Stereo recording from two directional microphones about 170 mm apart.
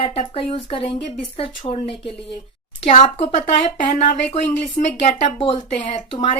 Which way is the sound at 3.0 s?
40° left (ahead or behind).